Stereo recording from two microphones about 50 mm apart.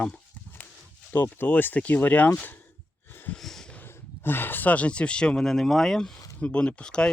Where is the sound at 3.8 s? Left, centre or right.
Left.